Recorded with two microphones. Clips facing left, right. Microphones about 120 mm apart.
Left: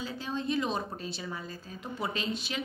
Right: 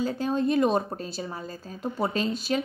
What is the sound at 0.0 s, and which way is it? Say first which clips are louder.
A woman's voice: right 9 dB; 50° right (ahead or behind).